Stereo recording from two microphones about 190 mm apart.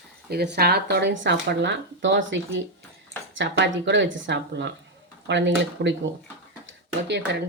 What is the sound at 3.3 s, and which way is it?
Dishes, 70° right (ahead or behind).